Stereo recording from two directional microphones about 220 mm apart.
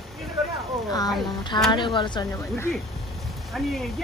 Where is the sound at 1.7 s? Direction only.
20° left (ahead or behind).